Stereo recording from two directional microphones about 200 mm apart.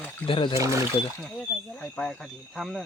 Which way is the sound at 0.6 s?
15° right (ahead or behind).